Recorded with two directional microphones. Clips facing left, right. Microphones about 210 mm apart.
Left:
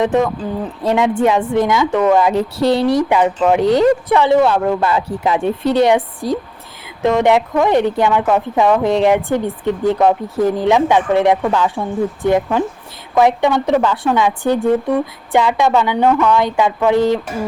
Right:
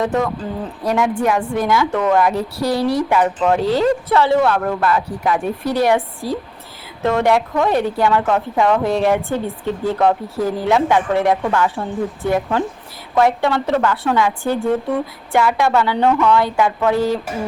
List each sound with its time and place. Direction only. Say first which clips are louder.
0.0 s a woman's voice: left 4 dB; 20° left (ahead or behind)